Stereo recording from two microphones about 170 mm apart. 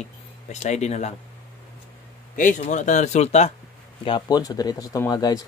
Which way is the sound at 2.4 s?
45° left (ahead or behind).